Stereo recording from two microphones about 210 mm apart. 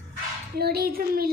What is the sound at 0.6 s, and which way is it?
Speech, 50° right (ahead or behind).